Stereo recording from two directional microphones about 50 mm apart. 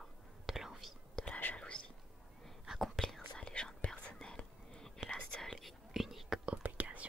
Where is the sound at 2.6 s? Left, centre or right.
Centre.